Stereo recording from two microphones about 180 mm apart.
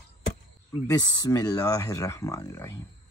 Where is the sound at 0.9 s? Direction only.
20° left (ahead or behind).